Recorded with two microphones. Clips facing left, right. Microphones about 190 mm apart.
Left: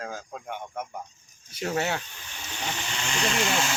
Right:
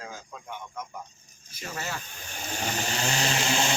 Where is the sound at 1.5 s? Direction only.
70° left (ahead or behind).